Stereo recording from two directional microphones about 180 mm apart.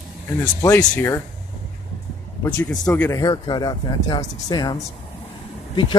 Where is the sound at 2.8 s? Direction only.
10° left (ahead or behind).